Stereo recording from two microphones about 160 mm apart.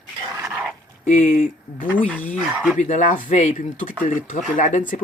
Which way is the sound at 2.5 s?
5° right (ahead or behind).